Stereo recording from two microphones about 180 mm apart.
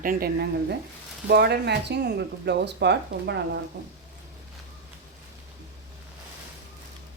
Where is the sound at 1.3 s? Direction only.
65° right (ahead or behind).